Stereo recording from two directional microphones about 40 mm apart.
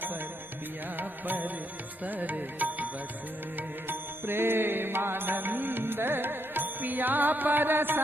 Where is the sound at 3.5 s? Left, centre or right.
Right.